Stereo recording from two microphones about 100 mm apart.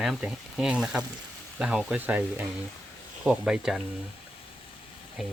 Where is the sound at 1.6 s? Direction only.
5° right (ahead or behind).